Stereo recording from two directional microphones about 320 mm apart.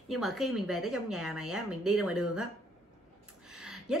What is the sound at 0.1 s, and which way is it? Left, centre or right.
Speech, centre.